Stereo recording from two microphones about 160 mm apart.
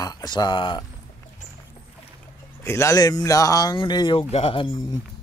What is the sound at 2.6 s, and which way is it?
Speech, 15° left (ahead or behind).